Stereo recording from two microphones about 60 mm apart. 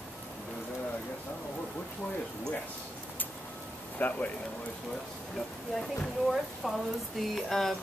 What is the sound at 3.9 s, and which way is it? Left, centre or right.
Speech, left.